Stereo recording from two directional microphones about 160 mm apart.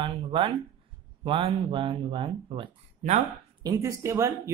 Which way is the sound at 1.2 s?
30° right (ahead or behind).